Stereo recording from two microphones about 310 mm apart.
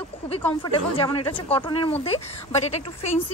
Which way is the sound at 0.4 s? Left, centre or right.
Centre.